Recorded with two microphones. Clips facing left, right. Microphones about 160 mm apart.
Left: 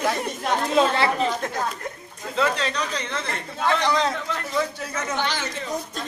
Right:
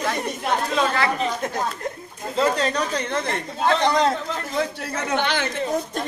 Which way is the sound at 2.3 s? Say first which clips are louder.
Right 3 dB; 40° right (ahead or behind).